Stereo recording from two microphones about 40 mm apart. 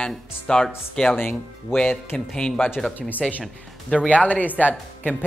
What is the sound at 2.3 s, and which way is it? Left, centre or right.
Speech, left.